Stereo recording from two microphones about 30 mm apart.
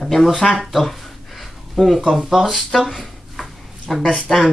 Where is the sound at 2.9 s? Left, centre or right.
Centre.